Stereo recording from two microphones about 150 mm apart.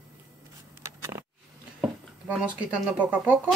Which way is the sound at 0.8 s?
20° right (ahead or behind).